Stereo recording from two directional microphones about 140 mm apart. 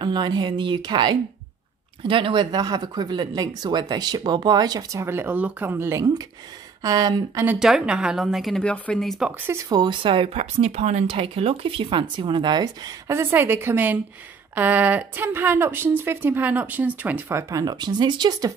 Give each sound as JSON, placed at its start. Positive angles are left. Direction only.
{"t": 0.0, "sound": "speech", "side_deg": -30}
{"t": 7.5, "sound": "a woman's voice", "side_deg": -5}
{"t": 9.5, "sound": "speech", "side_deg": -25}
{"t": 13.1, "sound": "speech", "side_deg": -15}
{"t": 17.4, "sound": "speech", "side_deg": -25}